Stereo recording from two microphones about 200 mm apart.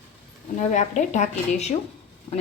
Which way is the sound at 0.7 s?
35° left (ahead or behind).